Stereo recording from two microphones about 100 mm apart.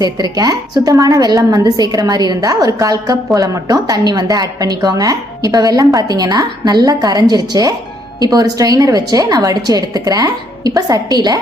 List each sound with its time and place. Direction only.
0.0 s a woman's voice: 40° right (ahead or behind)